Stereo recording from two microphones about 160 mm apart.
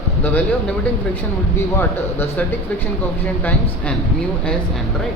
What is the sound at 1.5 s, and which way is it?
Speech, 15° left (ahead or behind).